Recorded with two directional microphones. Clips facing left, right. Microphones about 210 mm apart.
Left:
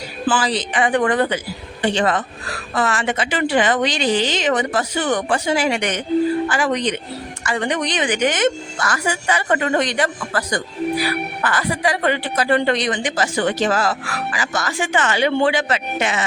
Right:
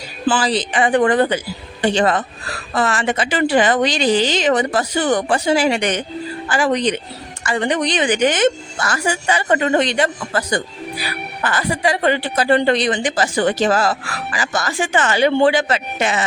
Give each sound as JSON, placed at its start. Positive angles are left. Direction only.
{"t": 0.3, "sound": "a woman's voice", "side_deg": -35}